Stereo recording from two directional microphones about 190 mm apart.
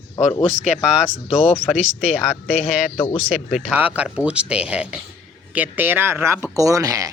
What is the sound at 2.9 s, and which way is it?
Speech, 30° left (ahead or behind).